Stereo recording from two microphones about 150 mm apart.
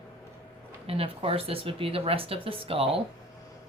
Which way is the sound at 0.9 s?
40° right (ahead or behind).